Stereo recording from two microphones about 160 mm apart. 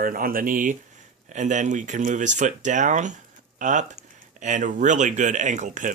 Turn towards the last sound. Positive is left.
turn(degrees=-50)  # may be behind; listen again after turning